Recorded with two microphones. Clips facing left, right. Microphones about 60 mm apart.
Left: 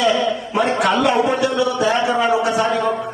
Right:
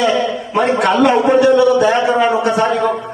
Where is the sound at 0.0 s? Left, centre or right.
Right.